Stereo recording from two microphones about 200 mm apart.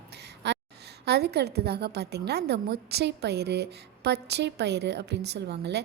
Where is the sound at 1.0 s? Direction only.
55° right (ahead or behind).